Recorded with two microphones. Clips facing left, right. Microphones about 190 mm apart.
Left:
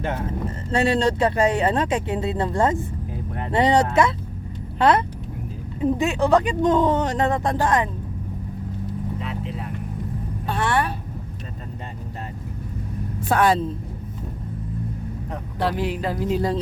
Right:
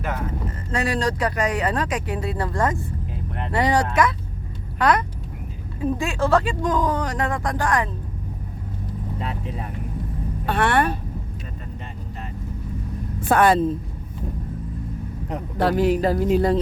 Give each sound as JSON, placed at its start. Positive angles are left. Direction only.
{"t": 0.7, "sound": "speech", "side_deg": 25}
{"t": 10.4, "sound": "speech", "side_deg": -65}
{"t": 13.2, "sound": "speech", "side_deg": -55}
{"t": 15.5, "sound": "speech", "side_deg": -45}